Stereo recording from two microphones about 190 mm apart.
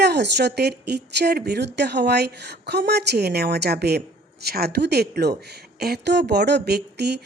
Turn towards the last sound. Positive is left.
turn(degrees=-60)  # may be behind; listen again after turning